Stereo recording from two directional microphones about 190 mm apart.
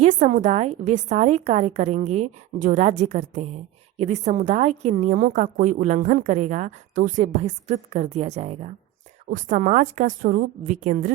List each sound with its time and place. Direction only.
0.0 s a woman's voice: 40° right (ahead or behind)